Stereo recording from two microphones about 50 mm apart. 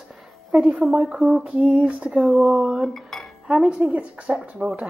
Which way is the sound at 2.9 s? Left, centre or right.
Centre.